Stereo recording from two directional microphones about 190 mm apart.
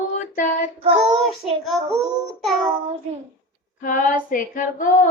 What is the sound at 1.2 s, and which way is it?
Child singing, centre (ahead or behind).